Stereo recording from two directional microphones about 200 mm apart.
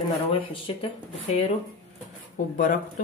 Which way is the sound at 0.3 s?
25° left (ahead or behind).